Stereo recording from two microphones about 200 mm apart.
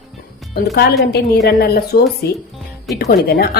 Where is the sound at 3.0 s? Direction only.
50° left (ahead or behind).